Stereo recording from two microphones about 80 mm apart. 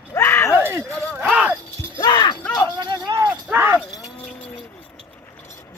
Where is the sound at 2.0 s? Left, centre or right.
Left.